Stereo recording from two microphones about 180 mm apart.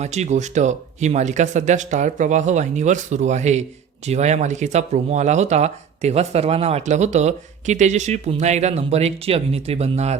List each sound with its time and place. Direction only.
0.0 s speech: 40° right (ahead or behind)